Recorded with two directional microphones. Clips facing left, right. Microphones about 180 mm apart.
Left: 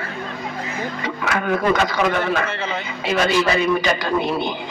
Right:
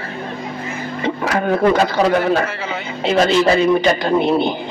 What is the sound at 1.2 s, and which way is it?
A man's voice, 30° right (ahead or behind).